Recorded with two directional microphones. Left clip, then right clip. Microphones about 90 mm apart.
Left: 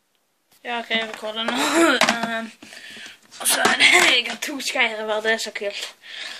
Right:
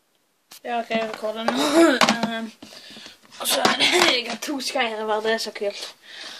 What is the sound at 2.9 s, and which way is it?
Speech, 20° right (ahead or behind).